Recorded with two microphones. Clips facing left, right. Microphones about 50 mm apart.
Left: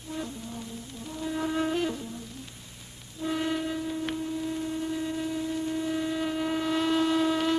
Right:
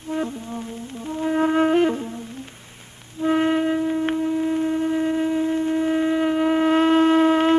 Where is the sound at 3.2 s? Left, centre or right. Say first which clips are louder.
Right 10 dB; right.